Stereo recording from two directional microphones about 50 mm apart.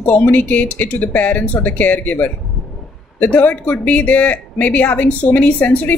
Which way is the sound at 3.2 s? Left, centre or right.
Left.